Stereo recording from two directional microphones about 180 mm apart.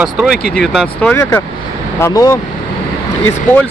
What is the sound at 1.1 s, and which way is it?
Speech, 15° left (ahead or behind).